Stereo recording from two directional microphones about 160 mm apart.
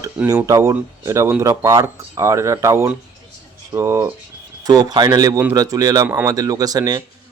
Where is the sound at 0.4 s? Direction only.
20° right (ahead or behind).